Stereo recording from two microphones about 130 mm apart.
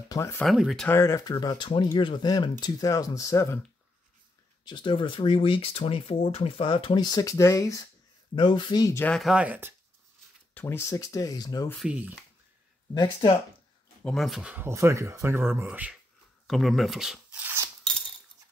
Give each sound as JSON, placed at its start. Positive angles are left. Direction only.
{"t": 0.1, "sound": "speech", "side_deg": 20}
{"t": 0.4, "sound": "speech", "side_deg": 0}
{"t": 0.8, "sound": "speech", "side_deg": 20}
{"t": 4.6, "sound": "speech", "side_deg": 35}
{"t": 8.4, "sound": "speech", "side_deg": 40}
{"t": 9.0, "sound": "speech", "side_deg": 5}
{"t": 9.3, "sound": "speech", "side_deg": -10}
{"t": 10.5, "sound": "speech", "side_deg": 15}
{"t": 11.8, "sound": "speech", "side_deg": -10}
{"t": 14.0, "sound": "speech", "side_deg": 0}
{"t": 14.5, "sound": "speech", "side_deg": -20}
{"t": 16.4, "sound": "speech", "side_deg": 0}
{"t": 17.4, "sound": "speech", "side_deg": -15}